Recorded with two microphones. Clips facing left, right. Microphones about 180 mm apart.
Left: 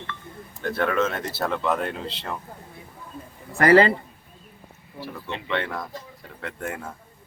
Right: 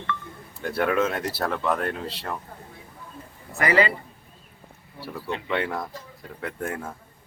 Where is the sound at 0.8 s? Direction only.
10° right (ahead or behind).